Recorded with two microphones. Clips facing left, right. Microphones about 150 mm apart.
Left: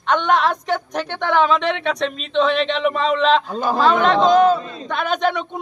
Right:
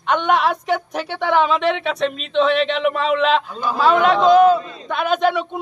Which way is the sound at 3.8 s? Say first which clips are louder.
Right 1 dB; 5° right (ahead or behind).